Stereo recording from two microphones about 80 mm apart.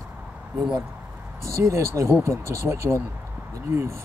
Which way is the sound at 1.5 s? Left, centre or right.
Right.